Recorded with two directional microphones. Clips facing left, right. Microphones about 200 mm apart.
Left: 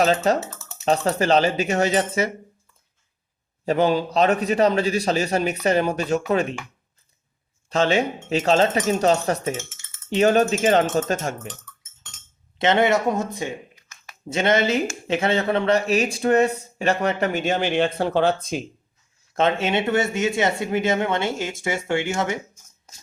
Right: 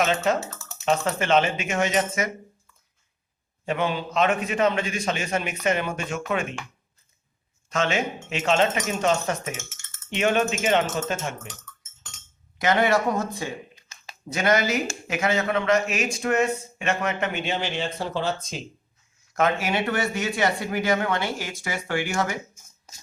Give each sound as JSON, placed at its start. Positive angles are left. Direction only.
{"t": 0.0, "sound": "a man's voice", "side_deg": 35}
{"t": 3.7, "sound": "a man's voice", "side_deg": 40}
{"t": 7.7, "sound": "a man's voice", "side_deg": 35}
{"t": 12.5, "sound": "speech", "side_deg": 25}
{"t": 13.7, "sound": "a sound", "side_deg": -25}
{"t": 14.3, "sound": "a man's voice", "side_deg": 25}
{"t": 19.3, "sound": "speech", "side_deg": 25}